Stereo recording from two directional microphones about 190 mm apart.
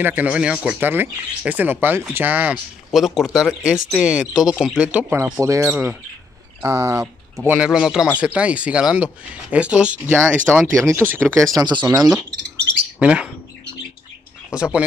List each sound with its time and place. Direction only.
0.0 s speech: 10° right (ahead or behind)
11.5 s speech: 20° right (ahead or behind)
13.0 s speech: 5° right (ahead or behind)
14.5 s speech: 5° right (ahead or behind)